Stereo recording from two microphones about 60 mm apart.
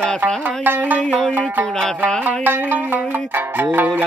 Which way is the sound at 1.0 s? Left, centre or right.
Centre.